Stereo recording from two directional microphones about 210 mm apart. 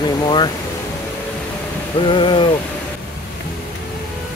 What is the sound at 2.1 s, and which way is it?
Speech, 25° left (ahead or behind).